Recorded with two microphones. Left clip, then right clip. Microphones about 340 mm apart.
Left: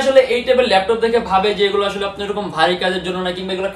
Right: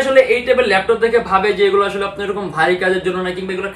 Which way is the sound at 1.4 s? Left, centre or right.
Centre.